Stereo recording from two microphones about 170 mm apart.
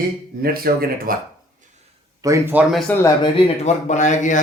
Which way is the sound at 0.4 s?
60° right (ahead or behind).